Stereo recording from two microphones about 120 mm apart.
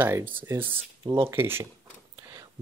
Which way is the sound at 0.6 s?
45° right (ahead or behind).